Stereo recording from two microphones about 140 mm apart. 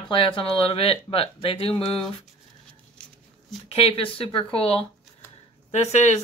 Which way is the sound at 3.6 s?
45° left (ahead or behind).